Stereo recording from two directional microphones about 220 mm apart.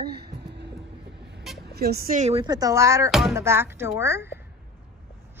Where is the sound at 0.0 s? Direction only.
45° right (ahead or behind).